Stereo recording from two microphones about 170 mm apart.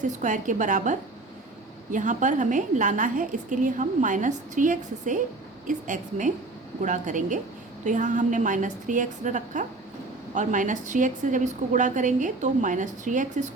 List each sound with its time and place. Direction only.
0.0 s a woman's voice: 45° right (ahead or behind)